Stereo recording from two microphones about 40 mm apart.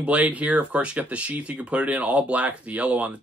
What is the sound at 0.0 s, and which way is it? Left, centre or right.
Speech, right.